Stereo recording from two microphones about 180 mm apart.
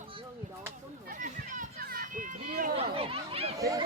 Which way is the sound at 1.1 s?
45° right (ahead or behind).